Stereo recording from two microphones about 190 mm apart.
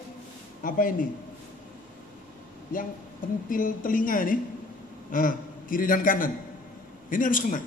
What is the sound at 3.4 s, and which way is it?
A woman's voice, 45° left (ahead or behind).